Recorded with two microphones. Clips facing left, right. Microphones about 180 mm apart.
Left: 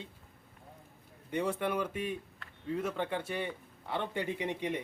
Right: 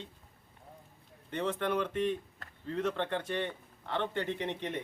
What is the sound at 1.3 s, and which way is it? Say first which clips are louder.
Speech: even; 10° left (ahead or behind).